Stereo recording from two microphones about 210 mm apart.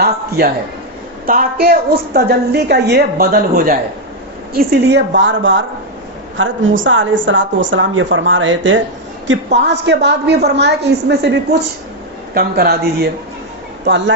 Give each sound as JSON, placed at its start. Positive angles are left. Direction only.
{"t": 0.0, "sound": "a woman's voice", "side_deg": -50}
{"t": 12.3, "sound": "a woman's voice", "side_deg": -45}